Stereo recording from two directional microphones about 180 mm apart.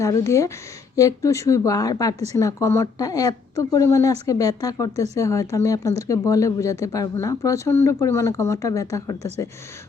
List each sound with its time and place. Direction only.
0.0 s speech: 15° left (ahead or behind)